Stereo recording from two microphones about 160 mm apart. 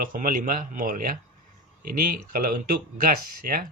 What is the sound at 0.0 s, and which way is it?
Speech, 60° right (ahead or behind).